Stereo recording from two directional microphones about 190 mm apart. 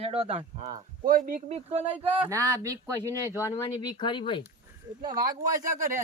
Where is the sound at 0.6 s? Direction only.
45° right (ahead or behind).